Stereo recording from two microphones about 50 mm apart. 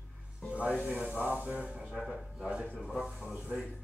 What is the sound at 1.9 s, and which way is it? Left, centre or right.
Speech, centre.